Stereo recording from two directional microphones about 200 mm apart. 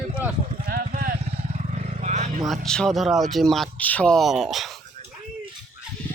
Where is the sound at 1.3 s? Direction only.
30° right (ahead or behind).